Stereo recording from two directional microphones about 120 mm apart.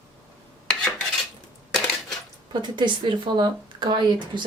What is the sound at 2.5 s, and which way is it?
Speech, 40° right (ahead or behind).